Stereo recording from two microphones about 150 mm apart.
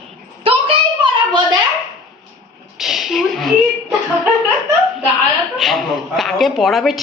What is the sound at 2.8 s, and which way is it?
Speech, centre (ahead or behind).